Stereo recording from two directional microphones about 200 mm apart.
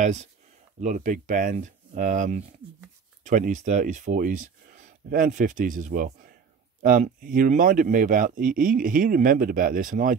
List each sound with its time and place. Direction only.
0.0 s speech: 35° right (ahead or behind)